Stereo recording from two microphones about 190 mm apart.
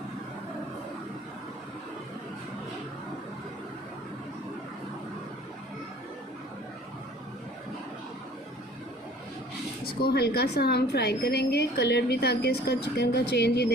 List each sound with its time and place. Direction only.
10.0 s a woman's voice: 55° left (ahead or behind)